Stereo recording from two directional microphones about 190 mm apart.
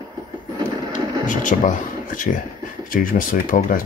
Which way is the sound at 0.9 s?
45° left (ahead or behind).